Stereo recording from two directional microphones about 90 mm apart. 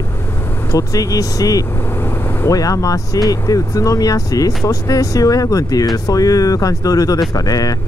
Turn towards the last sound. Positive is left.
turn(degrees=40)  # may be behind; listen again after turning